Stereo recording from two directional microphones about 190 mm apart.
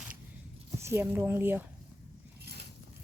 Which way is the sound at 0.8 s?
15° right (ahead or behind).